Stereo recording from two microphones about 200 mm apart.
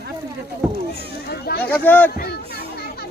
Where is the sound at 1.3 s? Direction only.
50° left (ahead or behind).